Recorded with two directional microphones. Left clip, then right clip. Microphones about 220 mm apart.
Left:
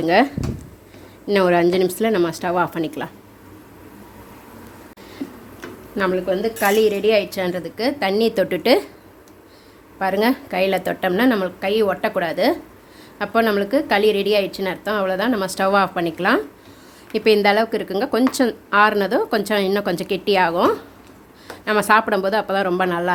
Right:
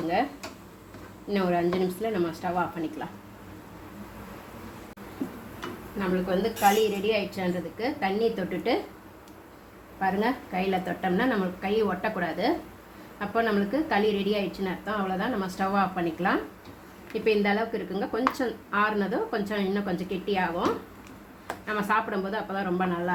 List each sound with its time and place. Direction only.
1.3 s a woman's voice: 45° left (ahead or behind)
6.6 s a woman's voice: 45° left (ahead or behind)
10.0 s a woman's voice: 40° left (ahead or behind)